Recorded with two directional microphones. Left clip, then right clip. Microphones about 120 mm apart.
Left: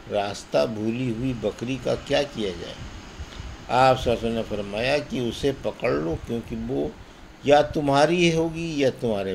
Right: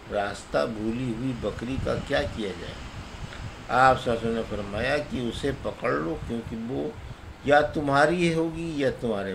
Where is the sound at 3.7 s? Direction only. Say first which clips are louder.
Left 1 dB; 50° left (ahead or behind).